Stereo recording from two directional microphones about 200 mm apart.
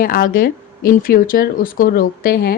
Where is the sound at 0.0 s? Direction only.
45° left (ahead or behind).